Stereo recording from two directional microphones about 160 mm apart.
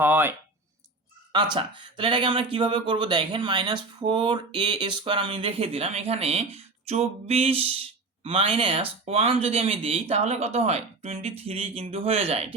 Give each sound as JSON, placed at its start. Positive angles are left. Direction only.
{"t": 0.0, "sound": "speech", "side_deg": -10}
{"t": 1.5, "sound": "speech", "side_deg": -30}